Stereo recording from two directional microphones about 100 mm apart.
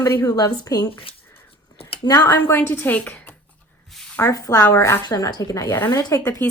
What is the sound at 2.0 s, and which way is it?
Speech, 40° left (ahead or behind).